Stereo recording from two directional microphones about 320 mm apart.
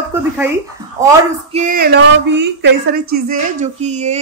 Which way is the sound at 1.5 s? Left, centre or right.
Right.